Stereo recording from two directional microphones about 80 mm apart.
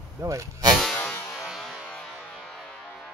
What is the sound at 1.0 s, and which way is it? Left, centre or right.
Music, left.